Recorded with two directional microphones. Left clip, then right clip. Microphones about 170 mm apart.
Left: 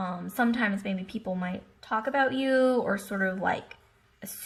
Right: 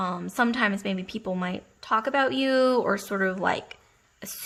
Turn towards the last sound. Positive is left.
turn(degrees=-25)  # may be behind; listen again after turning